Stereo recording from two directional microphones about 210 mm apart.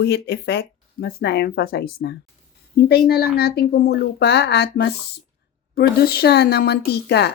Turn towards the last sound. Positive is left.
turn(degrees=50)  # may be behind; listen again after turning